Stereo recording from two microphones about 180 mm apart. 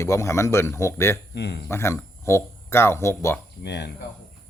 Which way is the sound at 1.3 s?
65° left (ahead or behind).